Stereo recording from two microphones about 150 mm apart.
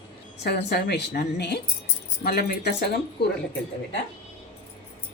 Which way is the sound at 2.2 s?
90° left.